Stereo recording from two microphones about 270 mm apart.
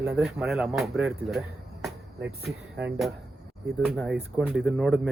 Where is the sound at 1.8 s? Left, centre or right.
Centre.